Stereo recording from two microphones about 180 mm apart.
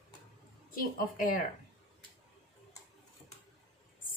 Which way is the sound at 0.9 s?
50° left (ahead or behind).